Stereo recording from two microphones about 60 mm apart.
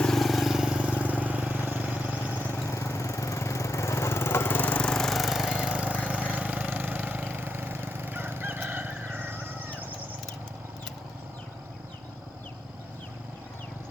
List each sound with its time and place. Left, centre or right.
0.0 s vehicle: centre
1.2 s vehicle: right
2.5 s lawn mower: left
4.8 s lawn mower: centre
6.1 s engine: centre